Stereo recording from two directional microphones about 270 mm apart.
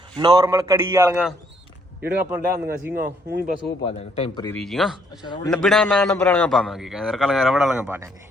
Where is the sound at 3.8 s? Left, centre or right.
Left.